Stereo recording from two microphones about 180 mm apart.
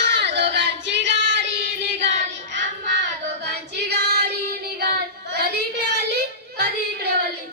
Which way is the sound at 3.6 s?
65° right (ahead or behind).